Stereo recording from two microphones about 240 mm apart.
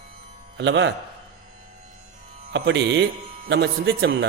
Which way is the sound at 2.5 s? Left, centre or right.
Right.